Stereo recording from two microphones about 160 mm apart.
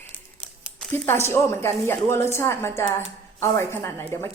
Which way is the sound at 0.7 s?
15° left (ahead or behind).